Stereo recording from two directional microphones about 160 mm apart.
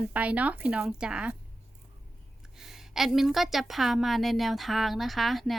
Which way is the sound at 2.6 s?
Centre (ahead or behind).